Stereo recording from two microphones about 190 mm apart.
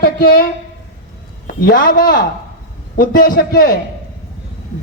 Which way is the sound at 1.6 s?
50° left (ahead or behind).